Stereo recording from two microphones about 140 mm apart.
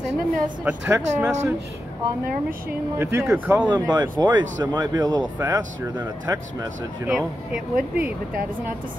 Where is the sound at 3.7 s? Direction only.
30° right (ahead or behind).